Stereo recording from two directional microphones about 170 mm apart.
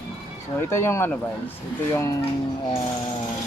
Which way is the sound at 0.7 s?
15° left (ahead or behind).